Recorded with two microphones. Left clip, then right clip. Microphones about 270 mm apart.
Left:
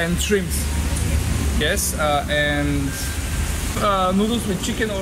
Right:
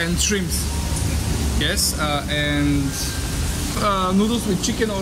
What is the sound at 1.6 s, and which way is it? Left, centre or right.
Speech, centre.